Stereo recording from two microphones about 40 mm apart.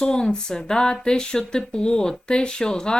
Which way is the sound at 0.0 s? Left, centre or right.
Centre.